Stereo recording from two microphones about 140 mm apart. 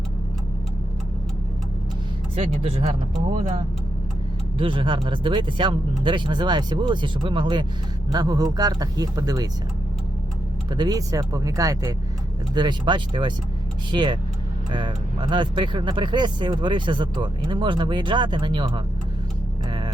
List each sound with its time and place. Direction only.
2.3 s speech: 45° right (ahead or behind)
4.5 s speech: 40° right (ahead or behind)
10.8 s speech: 25° right (ahead or behind)